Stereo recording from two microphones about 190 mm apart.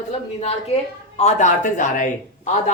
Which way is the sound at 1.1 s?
40° left (ahead or behind).